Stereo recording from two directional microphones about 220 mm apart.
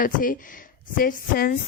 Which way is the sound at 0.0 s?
40° left (ahead or behind).